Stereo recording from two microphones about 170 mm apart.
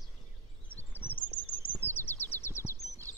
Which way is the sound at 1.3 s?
30° left (ahead or behind).